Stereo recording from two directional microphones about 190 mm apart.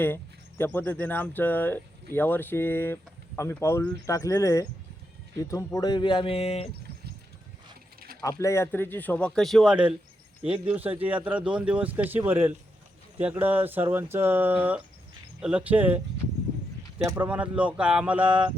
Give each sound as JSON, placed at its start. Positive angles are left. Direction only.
{"t": 0.6, "sound": "speech", "side_deg": 10}
{"t": 8.2, "sound": "speech", "side_deg": 15}
{"t": 17.0, "sound": "speech", "side_deg": -10}